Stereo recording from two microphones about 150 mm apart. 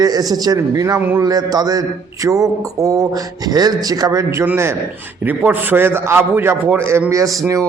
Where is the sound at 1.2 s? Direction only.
25° right (ahead or behind).